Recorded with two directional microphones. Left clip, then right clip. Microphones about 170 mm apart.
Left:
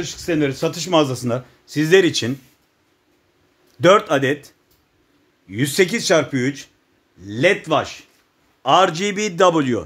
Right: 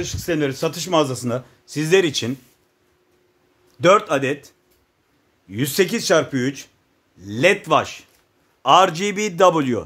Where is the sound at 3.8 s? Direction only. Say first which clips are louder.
Left 1 dB; 15° left (ahead or behind).